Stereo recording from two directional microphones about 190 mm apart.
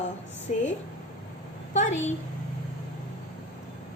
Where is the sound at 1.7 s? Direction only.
40° left (ahead or behind).